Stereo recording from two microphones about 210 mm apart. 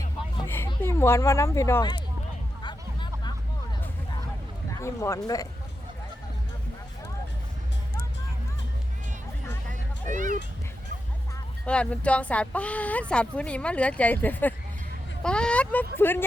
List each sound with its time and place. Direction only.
0.4 s a sound: 10° left (ahead or behind)
0.7 s speech: 10° left (ahead or behind)
2.6 s vehicle: 20° left (ahead or behind)
4.8 s speech: 15° left (ahead or behind)
10.1 s speech: 40° right (ahead or behind)
11.6 s speech: 5° left (ahead or behind)